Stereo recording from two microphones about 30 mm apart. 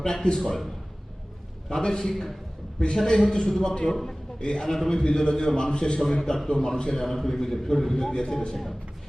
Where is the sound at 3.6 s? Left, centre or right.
Left.